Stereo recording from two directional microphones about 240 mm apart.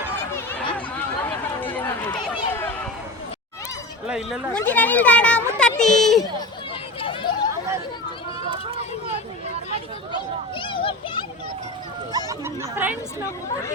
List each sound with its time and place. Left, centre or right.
1.2 s run: centre
4.0 s speech: centre
7.0 s chatter: left
10.6 s children playing: left
12.1 s speech: centre